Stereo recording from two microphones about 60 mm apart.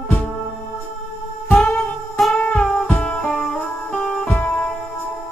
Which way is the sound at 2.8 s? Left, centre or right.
Left.